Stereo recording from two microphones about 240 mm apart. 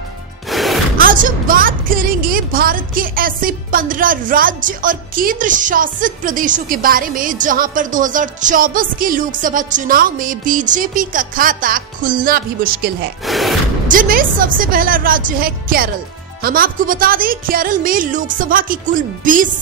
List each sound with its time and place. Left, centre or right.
0.5 s music: centre
0.9 s a woman's voice: right
13.2 s a sound: centre
13.8 s a woman's voice: right